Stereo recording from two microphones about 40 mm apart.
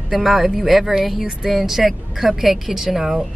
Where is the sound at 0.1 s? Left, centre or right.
Centre.